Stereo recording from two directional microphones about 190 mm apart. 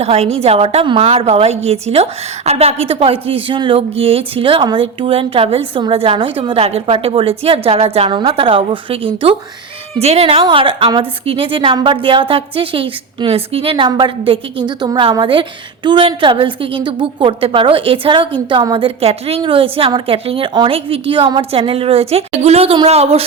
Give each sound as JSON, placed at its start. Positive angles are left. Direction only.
{"t": 0.0, "sound": "a woman's voice", "side_deg": -35}